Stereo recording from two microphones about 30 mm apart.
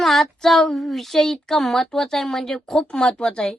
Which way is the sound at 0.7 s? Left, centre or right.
Centre.